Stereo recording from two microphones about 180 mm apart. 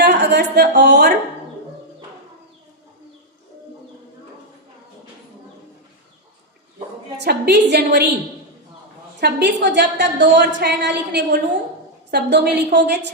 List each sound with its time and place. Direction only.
0.0 s a woman's voice: 65° right (ahead or behind)
7.2 s a woman's voice: 65° right (ahead or behind)
9.2 s a woman's voice: 75° right (ahead or behind)